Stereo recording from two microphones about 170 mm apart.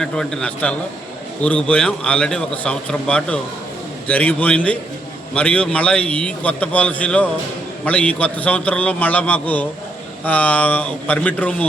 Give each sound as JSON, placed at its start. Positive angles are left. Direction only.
{"t": 0.0, "sound": "a man's voice", "side_deg": 5}